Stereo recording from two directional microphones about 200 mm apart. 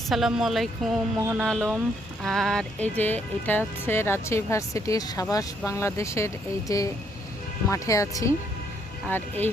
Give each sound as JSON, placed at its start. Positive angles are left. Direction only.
{"t": 0.1, "sound": "speech", "side_deg": 0}